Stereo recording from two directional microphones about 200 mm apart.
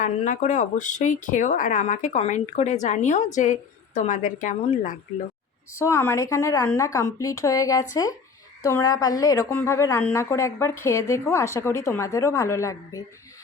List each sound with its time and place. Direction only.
0.0 s speech: 40° left (ahead or behind)
5.7 s a woman's voice: 15° left (ahead or behind)